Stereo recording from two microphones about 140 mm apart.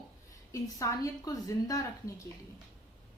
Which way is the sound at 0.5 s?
25° left (ahead or behind).